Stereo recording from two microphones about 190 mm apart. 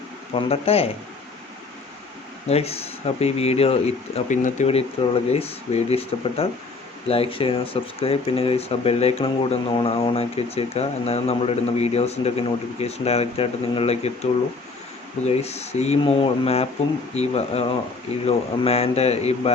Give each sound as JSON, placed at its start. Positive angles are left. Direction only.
{"t": 0.3, "sound": "speech", "side_deg": 30}
{"t": 2.5, "sound": "speech", "side_deg": 30}
{"t": 15.3, "sound": "speech", "side_deg": 35}